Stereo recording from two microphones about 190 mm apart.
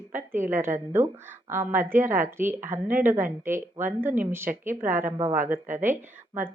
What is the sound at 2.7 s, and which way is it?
Speech, 45° right (ahead or behind).